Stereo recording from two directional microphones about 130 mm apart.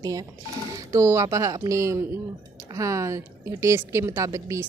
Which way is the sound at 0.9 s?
20° right (ahead or behind).